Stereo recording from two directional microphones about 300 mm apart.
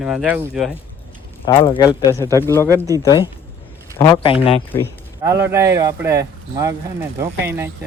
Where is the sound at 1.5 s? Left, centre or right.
Centre.